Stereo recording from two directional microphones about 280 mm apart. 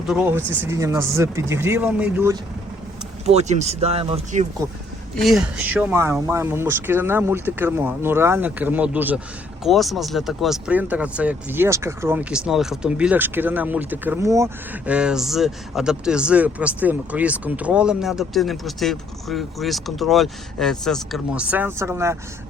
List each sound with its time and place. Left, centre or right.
0.1 s speech: centre
3.2 s speech: right
5.1 s speech: centre